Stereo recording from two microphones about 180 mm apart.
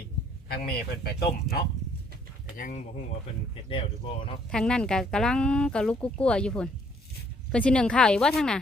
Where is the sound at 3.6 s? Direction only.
30° left (ahead or behind).